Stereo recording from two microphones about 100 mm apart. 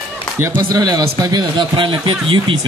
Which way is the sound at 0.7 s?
40° right (ahead or behind).